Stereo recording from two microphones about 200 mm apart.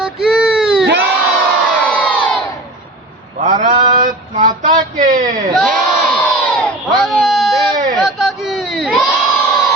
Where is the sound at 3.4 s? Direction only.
40° right (ahead or behind).